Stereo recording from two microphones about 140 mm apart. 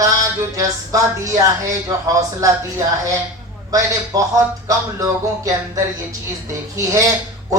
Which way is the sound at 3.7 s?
25° right (ahead or behind).